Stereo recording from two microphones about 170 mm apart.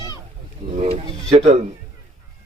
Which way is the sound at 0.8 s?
40° right (ahead or behind).